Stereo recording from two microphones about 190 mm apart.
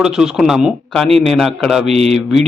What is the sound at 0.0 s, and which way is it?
A man's voice, 5° right (ahead or behind).